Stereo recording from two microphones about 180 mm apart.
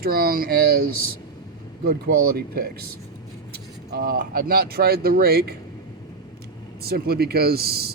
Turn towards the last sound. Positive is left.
turn(degrees=-60)  # may be behind; listen again after turning